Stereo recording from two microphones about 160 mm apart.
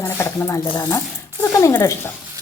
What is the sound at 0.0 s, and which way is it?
A woman's voice, 15° left (ahead or behind).